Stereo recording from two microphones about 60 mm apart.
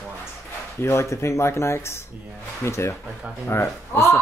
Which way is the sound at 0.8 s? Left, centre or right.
Left.